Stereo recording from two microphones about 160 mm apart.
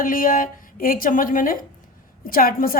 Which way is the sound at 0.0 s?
60° left (ahead or behind).